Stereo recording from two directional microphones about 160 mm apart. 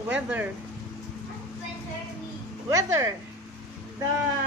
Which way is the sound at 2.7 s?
20° right (ahead or behind).